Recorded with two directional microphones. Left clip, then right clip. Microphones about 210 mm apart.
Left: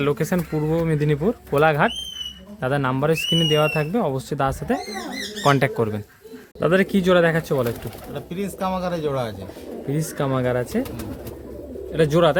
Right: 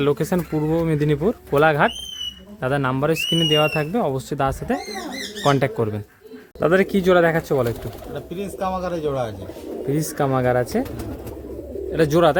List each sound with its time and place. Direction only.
0.0 s speech: 15° right (ahead or behind)
8.1 s speech: 35° left (ahead or behind)
9.9 s speech: 5° right (ahead or behind)
11.9 s speech: 5° right (ahead or behind)